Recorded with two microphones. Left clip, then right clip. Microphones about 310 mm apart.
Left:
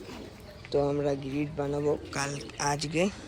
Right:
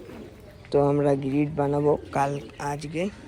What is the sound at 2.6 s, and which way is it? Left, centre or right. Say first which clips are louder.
Speech: left 3 dB; centre.